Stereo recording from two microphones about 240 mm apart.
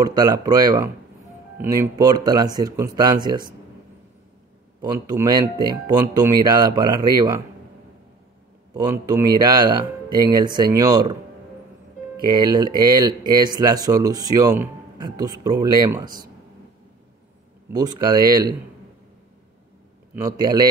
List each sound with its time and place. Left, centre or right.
0.0 s speech: centre
4.8 s speech: centre
8.7 s speech: centre
12.3 s speech: centre
17.7 s speech: centre
20.2 s speech: centre